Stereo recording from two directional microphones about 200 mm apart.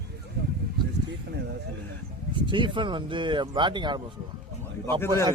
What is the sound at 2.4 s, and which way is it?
Speech, 25° right (ahead or behind).